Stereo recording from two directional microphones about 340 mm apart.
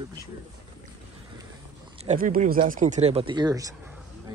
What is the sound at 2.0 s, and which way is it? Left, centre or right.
Speech, right.